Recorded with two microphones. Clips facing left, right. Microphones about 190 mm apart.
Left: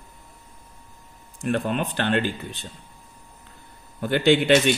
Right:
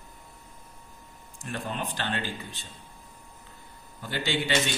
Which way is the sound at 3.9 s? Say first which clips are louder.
Left 11 dB; 60° left (ahead or behind).